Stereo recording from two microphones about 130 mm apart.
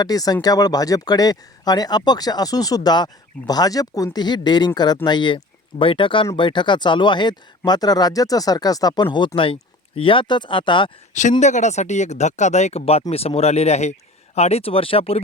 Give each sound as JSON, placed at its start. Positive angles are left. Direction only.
{"t": 0.0, "sound": "speech", "side_deg": 30}
{"t": 11.1, "sound": "speech", "side_deg": 70}